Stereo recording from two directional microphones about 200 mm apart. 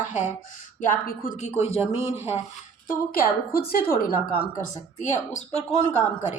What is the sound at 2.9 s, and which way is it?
A woman's voice, 50° left (ahead or behind).